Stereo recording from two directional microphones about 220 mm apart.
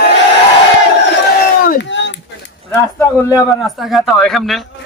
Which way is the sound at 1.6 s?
55° left (ahead or behind).